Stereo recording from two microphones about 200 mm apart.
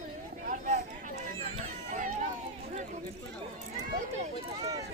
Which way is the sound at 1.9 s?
40° right (ahead or behind).